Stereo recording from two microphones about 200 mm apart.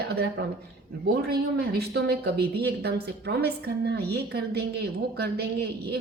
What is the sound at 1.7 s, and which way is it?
Speech, 55° right (ahead or behind).